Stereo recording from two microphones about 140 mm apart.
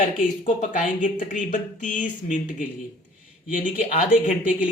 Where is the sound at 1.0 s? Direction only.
65° left (ahead or behind).